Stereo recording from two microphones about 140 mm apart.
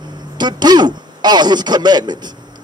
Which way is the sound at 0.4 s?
30° right (ahead or behind).